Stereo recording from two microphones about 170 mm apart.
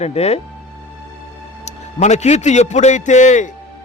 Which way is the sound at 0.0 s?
40° left (ahead or behind).